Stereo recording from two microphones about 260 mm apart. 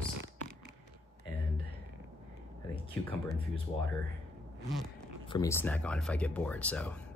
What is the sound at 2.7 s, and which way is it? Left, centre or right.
Speech, centre.